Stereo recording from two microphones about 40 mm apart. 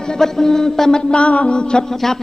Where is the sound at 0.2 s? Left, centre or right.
Centre.